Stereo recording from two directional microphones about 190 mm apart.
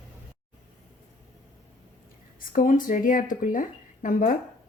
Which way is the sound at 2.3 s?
45° left (ahead or behind).